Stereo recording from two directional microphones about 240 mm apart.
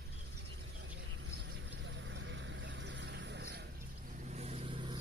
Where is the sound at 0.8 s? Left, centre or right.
Right.